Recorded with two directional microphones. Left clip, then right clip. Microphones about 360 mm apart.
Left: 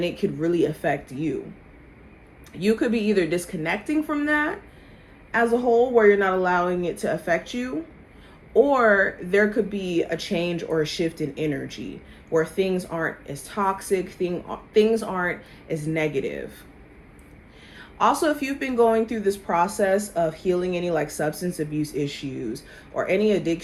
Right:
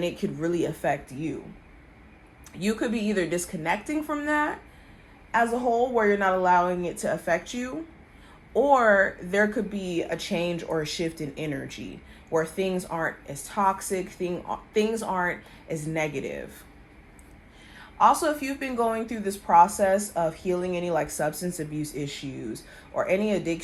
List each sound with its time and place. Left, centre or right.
0.0 s speech: right
2.6 s speech: right
17.9 s speech: centre